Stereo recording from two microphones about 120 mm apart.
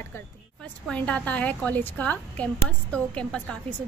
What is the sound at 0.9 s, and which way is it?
A woman's voice, 10° left (ahead or behind).